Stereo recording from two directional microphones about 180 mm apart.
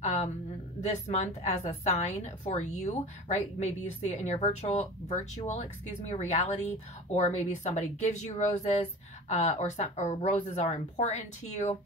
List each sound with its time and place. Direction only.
0.8 s a woman's voice: 35° left (ahead or behind)